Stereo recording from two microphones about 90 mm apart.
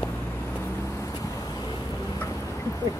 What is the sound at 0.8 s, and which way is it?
Vehicle, 35° left (ahead or behind).